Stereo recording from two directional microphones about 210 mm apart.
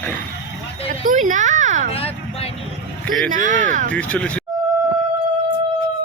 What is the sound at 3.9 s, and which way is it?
Speech, 5° left (ahead or behind).